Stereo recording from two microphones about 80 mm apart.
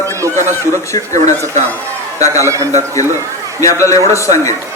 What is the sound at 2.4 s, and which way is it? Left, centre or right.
Speech, right.